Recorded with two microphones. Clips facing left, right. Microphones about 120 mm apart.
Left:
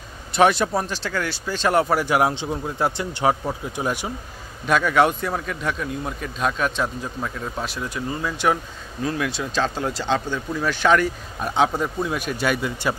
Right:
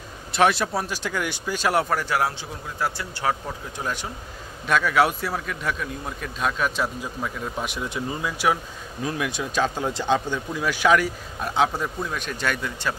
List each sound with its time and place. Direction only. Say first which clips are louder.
0.3 s speech: left 3 dB; centre (ahead or behind)
1.9 s a man's voice: left 4 dB; 15° left (ahead or behind)
4.6 s a man's voice: left 2 dB; centre (ahead or behind)
7.6 s a man's voice: left 1 dB; 20° right (ahead or behind); by 12.9 s 10° left (ahead or behind)